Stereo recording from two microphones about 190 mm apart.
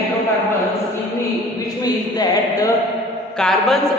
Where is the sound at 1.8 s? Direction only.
20° left (ahead or behind).